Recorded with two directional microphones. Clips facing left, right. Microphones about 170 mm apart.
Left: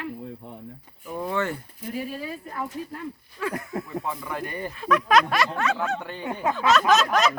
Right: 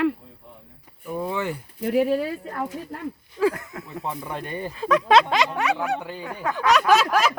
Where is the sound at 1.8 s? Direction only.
70° right (ahead or behind).